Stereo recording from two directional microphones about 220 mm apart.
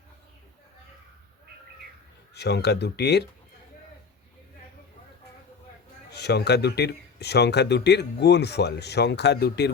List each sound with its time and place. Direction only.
2.3 s speech: 50° left (ahead or behind)
6.1 s speech: 50° left (ahead or behind)